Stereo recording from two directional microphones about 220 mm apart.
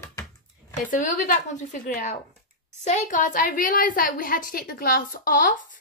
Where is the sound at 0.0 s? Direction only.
10° left (ahead or behind).